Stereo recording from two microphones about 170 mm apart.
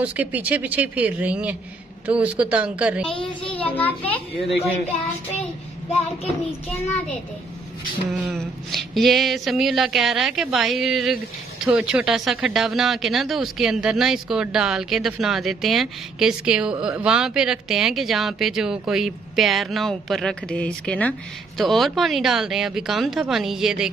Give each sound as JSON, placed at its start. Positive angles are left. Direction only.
{"t": 0.0, "sound": "speech", "side_deg": -10}
{"t": 3.2, "sound": "a child's voice", "side_deg": 30}
{"t": 3.6, "sound": "a child's voice", "side_deg": 10}
{"t": 8.2, "sound": "speech", "side_deg": 0}